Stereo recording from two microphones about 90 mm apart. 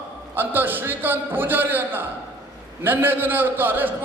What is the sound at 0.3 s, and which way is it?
A man's voice, 20° right (ahead or behind).